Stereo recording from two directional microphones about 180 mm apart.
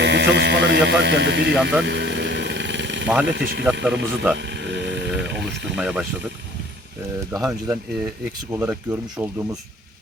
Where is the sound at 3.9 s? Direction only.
80° right.